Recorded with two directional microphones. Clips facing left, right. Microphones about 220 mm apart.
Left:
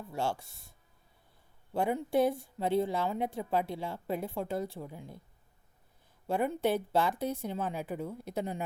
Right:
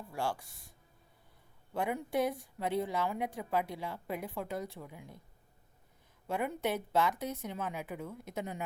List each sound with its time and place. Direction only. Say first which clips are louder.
0.1 s speech: left 2 dB; 25° left (ahead or behind)
1.7 s a woman's voice: left 4 dB; 30° left (ahead or behind)
6.2 s speech: left 4 dB; 30° left (ahead or behind)